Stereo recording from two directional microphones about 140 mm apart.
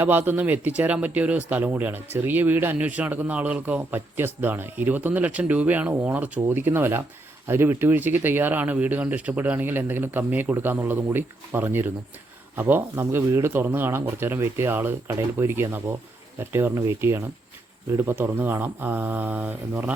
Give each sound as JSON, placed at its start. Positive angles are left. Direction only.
{"t": 0.0, "sound": "a man's voice", "side_deg": -15}